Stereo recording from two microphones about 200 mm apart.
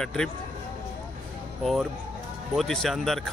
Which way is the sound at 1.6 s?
Centre (ahead or behind).